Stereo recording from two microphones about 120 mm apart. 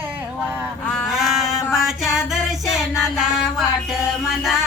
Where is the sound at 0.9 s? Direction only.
Centre (ahead or behind).